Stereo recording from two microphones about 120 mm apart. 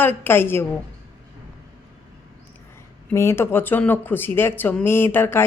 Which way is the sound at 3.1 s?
20° left (ahead or behind).